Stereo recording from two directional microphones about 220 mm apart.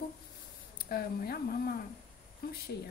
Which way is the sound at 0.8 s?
45° left (ahead or behind).